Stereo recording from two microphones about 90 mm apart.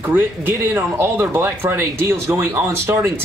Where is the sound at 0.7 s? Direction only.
30° right (ahead or behind).